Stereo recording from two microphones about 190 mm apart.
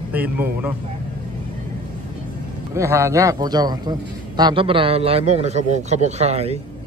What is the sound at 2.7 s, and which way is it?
A man's voice, 15° right (ahead or behind).